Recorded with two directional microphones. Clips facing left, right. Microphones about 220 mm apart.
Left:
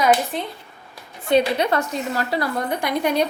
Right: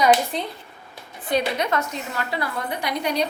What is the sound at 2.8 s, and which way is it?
Speech, 50° left (ahead or behind).